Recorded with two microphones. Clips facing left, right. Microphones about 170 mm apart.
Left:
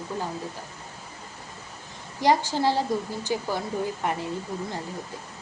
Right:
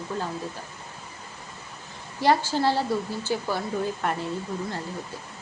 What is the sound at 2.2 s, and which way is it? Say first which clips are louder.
A woman's voice: even; 15° left (ahead or behind).